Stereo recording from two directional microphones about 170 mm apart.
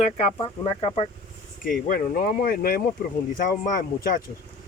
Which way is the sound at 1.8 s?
60° left (ahead or behind).